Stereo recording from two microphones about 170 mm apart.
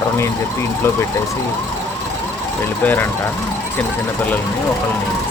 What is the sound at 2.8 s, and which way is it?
Speech, 10° left (ahead or behind).